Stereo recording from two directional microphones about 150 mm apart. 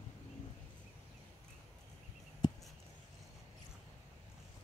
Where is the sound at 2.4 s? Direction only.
30° left (ahead or behind).